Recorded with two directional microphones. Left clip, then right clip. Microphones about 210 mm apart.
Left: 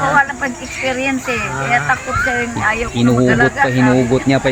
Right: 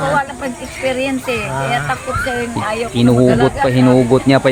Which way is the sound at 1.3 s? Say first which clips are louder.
Left 1 dB; 45° right (ahead or behind).